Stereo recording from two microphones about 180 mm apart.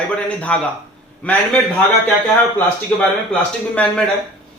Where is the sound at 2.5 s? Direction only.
5° left (ahead or behind).